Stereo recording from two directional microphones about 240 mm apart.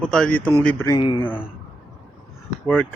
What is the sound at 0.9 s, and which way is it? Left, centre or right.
Speech, centre.